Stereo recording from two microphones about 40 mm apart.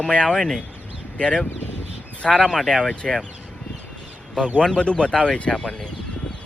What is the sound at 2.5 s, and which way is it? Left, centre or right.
Speech, centre.